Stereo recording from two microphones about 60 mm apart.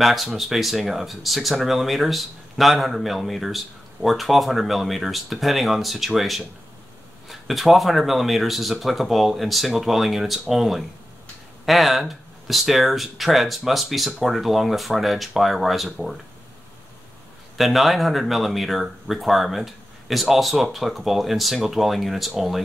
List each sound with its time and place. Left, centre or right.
0.0 s speech: centre
17.6 s speech: centre